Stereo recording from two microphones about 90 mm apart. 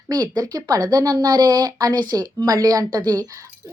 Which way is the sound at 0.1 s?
50° right (ahead or behind).